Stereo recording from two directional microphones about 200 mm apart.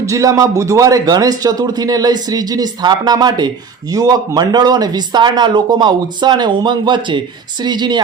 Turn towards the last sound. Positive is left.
turn(degrees=-20)  # may be behind; listen again after turning